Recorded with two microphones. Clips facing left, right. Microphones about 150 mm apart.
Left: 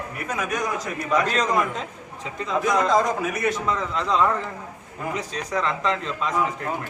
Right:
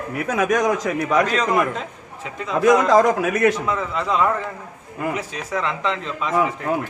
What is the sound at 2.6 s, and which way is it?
Speech, 85° right.